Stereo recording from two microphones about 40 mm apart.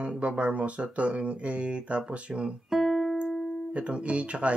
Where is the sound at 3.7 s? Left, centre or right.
Right.